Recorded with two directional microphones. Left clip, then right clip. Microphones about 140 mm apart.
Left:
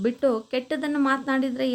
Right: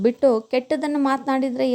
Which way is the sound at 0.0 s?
35° right (ahead or behind).